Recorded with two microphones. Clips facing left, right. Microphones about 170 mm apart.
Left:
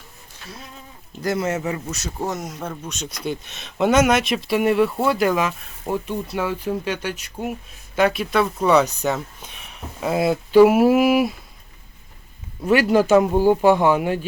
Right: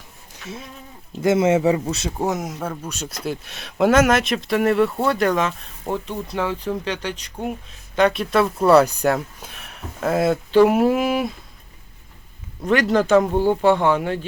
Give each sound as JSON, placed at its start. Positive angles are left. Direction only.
{"t": 1.2, "sound": "speech", "side_deg": -25}
{"t": 2.2, "sound": "a man's voice", "side_deg": -10}
{"t": 12.6, "sound": "a man's voice", "side_deg": 5}